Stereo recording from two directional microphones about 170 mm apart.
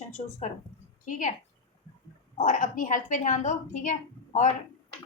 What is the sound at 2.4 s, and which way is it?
A woman's voice, 50° left (ahead or behind).